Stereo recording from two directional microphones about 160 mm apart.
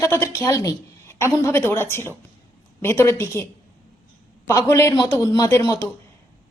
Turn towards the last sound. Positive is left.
turn(degrees=20)  # may be behind; listen again after turning